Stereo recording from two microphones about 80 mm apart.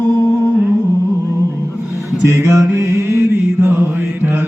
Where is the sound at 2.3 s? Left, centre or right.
Right.